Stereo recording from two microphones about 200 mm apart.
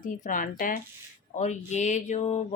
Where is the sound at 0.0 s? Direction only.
40° left (ahead or behind).